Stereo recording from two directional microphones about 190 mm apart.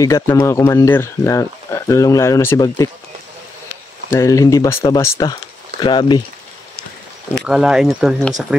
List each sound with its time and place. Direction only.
0.0 s speech: 15° left (ahead or behind)
4.1 s speech: 15° left (ahead or behind)
7.3 s speech: 5° right (ahead or behind)